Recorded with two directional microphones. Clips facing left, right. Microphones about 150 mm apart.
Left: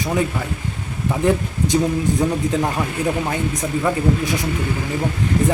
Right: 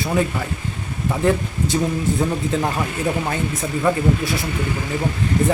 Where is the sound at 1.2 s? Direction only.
15° left (ahead or behind).